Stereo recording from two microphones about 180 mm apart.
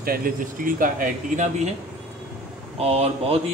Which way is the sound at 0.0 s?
55° right (ahead or behind).